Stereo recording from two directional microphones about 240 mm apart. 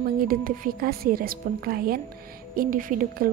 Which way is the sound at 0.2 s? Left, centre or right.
Right.